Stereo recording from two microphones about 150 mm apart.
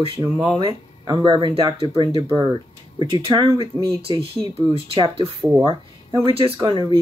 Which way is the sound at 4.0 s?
40° right (ahead or behind).